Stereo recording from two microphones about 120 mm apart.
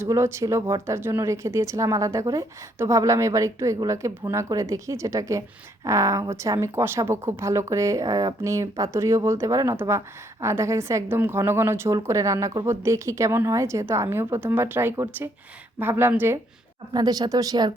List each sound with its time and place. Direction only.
0.0 s a woman's voice: 20° right (ahead or behind)
16.9 s speech: 30° right (ahead or behind)